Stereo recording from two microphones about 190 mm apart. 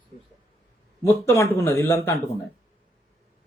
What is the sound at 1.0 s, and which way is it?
Speech, 15° left (ahead or behind).